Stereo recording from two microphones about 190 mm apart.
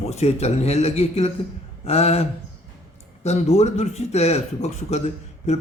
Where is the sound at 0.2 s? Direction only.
35° left (ahead or behind).